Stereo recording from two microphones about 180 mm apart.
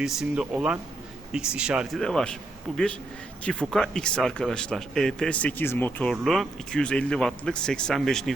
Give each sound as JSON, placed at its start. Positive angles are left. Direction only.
{"t": 0.0, "sound": "speech", "side_deg": -5}